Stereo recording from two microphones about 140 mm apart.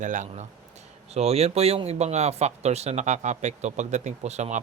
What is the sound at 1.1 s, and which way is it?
Speech, 50° right (ahead or behind).